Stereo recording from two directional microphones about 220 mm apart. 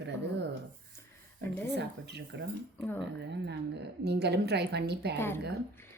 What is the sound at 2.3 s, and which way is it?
Speech, 50° right (ahead or behind).